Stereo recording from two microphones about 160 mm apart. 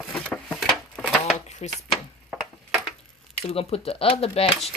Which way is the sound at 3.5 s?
40° left (ahead or behind).